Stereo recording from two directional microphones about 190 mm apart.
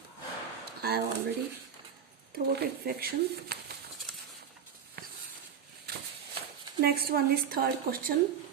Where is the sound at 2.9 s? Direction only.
50° right (ahead or behind).